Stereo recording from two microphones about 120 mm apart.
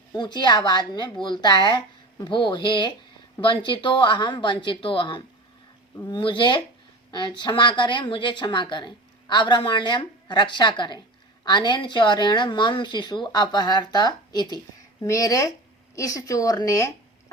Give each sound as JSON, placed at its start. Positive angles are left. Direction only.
{"t": 0.1, "sound": "a woman's voice", "side_deg": 40}